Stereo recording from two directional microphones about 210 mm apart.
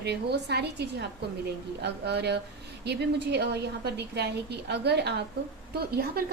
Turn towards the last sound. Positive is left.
turn(degrees=-50)  # may be behind; listen again after turning